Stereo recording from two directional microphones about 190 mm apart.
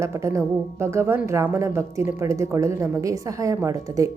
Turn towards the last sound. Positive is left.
turn(degrees=-15)  # may be behind; listen again after turning